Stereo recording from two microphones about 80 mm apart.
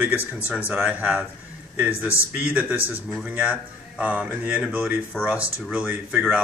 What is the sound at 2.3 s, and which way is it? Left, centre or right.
Speech, centre.